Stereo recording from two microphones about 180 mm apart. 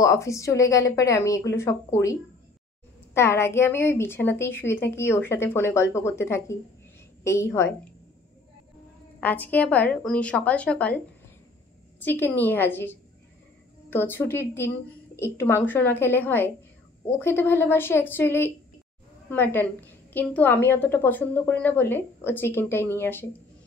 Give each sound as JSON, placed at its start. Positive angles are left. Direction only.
{"t": 0.0, "sound": "a woman's voice", "side_deg": 15}
{"t": 3.2, "sound": "a woman's voice", "side_deg": 15}
{"t": 9.2, "sound": "a woman's voice", "side_deg": 10}
{"t": 12.0, "sound": "a woman's voice", "side_deg": 10}